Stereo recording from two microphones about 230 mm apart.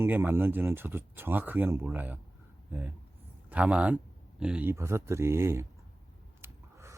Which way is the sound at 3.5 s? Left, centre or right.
Centre.